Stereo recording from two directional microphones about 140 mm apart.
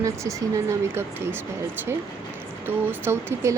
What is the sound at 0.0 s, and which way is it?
Speech, 25° right (ahead or behind).